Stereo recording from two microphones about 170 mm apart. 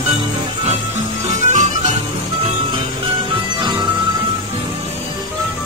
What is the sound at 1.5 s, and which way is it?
Music, 45° right (ahead or behind).